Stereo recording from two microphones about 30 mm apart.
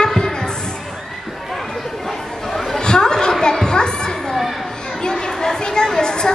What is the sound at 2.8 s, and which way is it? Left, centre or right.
Chatter, left.